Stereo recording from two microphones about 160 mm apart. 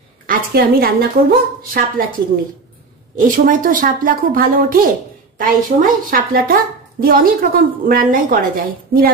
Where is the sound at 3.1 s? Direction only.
60° right (ahead or behind).